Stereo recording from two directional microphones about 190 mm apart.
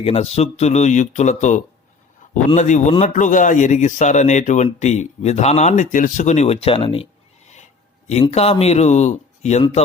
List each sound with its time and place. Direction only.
0.0 s speech: 35° left (ahead or behind)
7.5 s a sound: 40° left (ahead or behind)
8.3 s speech: 35° left (ahead or behind)